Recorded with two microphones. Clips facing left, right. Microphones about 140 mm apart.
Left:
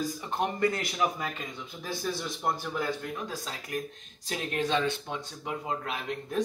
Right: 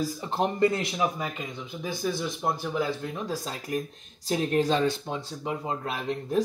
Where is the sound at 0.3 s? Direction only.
30° right (ahead or behind).